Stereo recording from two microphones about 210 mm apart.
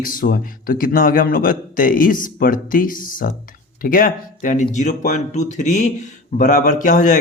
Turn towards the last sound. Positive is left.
turn(degrees=35)  # may be behind; listen again after turning